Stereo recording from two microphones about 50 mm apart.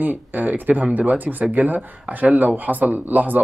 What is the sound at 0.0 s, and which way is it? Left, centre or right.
Speech, right.